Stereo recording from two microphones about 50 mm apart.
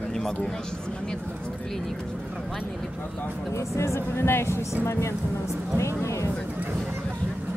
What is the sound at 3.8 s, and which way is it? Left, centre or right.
Speech, left.